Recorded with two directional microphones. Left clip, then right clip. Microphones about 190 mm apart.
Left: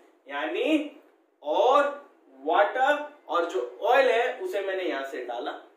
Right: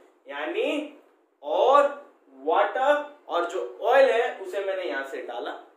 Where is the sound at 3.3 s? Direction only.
15° right (ahead or behind).